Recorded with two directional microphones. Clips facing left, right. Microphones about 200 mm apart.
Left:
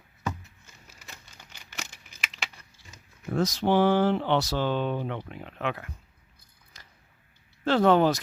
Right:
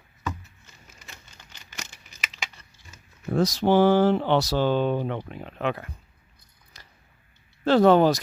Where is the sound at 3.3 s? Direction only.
35° right (ahead or behind).